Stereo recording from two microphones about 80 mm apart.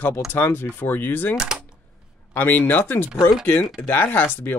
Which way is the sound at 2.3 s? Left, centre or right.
Left.